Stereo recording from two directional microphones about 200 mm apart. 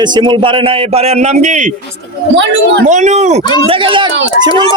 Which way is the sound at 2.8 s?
35° right (ahead or behind).